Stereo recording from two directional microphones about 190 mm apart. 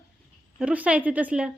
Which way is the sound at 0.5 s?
5° right (ahead or behind).